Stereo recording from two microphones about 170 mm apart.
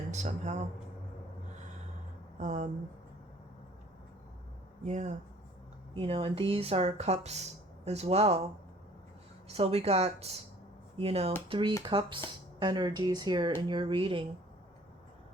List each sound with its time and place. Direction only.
0.1 s speech: 45° right (ahead or behind)
2.4 s speech: 45° right (ahead or behind)
4.8 s speech: 45° right (ahead or behind)
5.9 s speech: 35° right (ahead or behind)
9.5 s speech: 35° right (ahead or behind)